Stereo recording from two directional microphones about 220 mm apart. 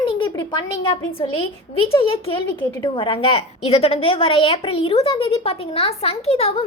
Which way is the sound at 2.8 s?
25° left (ahead or behind).